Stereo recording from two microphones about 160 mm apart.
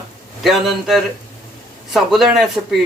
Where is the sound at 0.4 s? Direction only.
Centre (ahead or behind).